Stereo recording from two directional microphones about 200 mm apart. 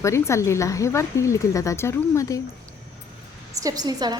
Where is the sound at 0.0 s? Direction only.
15° left (ahead or behind).